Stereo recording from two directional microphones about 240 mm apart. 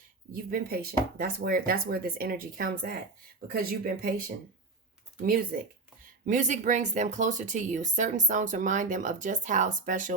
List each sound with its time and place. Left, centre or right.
0.3 s speech: right
5.2 s speech: right